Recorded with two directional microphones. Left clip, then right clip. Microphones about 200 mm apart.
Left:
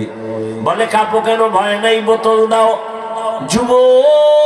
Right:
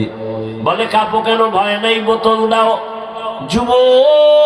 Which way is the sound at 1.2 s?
30° left (ahead or behind).